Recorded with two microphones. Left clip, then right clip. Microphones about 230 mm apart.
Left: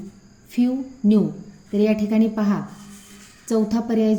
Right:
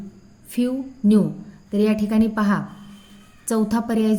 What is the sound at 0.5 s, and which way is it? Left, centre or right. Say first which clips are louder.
A woman's voice: left 1 dB; right.